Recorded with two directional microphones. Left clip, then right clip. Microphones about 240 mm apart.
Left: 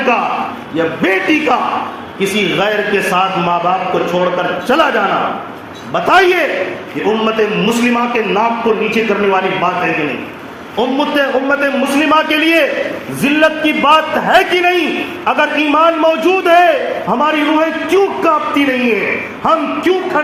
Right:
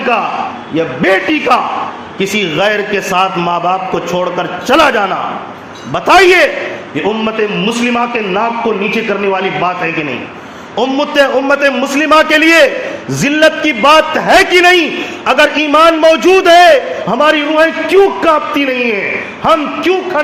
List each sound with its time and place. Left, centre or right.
1.0 s a man's voice: right
2.6 s a man's voice: right
4.7 s a man's voice: right
10.8 s a man's voice: right